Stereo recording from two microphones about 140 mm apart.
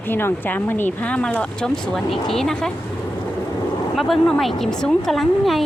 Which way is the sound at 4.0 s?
5° left (ahead or behind).